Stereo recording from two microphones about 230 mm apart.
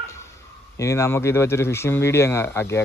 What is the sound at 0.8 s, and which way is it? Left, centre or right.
Speech, centre.